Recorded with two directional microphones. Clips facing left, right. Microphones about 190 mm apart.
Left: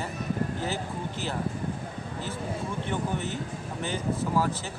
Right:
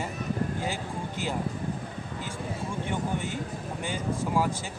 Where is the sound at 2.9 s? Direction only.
15° right (ahead or behind).